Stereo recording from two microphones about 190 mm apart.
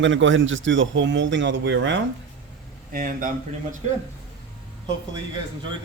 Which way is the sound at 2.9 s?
45° right (ahead or behind).